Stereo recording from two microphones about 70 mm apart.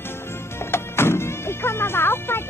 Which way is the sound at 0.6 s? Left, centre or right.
Left.